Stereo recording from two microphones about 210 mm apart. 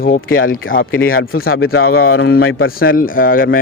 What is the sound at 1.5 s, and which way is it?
Speech, 80° left.